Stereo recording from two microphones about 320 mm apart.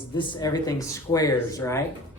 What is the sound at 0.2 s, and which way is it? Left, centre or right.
Speech, centre.